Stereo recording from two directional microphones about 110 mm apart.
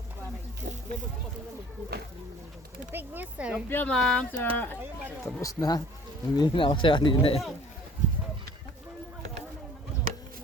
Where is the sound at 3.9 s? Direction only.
5° left (ahead or behind).